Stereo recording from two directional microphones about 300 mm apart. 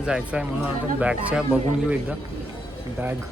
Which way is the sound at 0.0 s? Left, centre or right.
Centre.